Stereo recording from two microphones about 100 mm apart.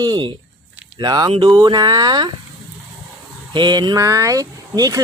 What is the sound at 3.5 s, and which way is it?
Speech, 50° right (ahead or behind).